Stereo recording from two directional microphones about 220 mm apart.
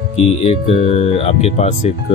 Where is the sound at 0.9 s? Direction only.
30° left (ahead or behind).